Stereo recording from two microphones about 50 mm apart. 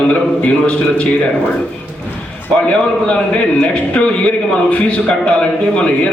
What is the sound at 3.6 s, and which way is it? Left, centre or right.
A man's voice, centre.